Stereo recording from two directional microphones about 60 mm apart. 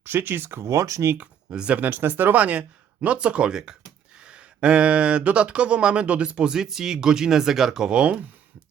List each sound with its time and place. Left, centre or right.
0.0 s speech: right
0.6 s speech: right
1.2 s speech: centre
1.8 s speech: right; by 8.2 s centre